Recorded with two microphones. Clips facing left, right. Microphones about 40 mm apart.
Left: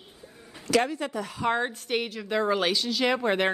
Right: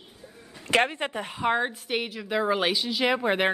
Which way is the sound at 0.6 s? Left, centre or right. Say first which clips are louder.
Right 1 dB; right.